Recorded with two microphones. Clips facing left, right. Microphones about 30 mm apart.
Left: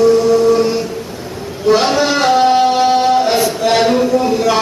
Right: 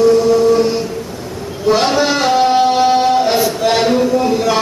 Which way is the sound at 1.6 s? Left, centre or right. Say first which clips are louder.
Left 1 dB; centre.